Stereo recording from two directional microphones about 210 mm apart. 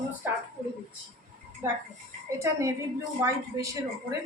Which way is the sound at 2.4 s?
15° right (ahead or behind).